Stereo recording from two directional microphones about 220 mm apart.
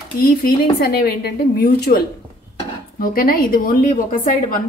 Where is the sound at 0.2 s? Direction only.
45° left (ahead or behind).